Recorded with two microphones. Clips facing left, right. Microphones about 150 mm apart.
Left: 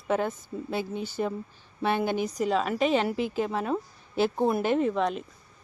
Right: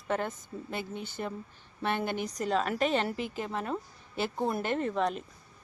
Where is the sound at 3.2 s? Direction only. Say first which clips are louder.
Left 8 dB; 90° left.